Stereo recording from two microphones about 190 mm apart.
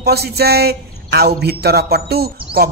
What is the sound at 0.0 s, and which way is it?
A man's voice, 55° right (ahead or behind).